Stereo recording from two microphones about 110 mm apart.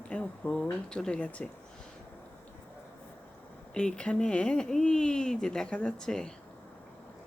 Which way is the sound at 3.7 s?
10° left (ahead or behind).